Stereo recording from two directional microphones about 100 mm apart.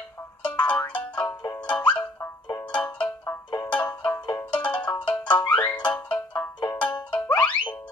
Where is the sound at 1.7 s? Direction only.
45° left (ahead or behind).